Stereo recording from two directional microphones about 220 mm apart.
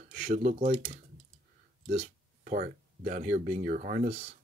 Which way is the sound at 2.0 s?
35° right (ahead or behind).